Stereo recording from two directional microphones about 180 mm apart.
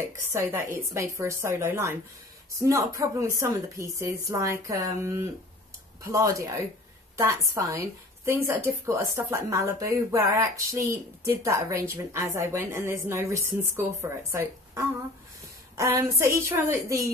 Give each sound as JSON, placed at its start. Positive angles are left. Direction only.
{"t": 0.2, "sound": "speech", "side_deg": -15}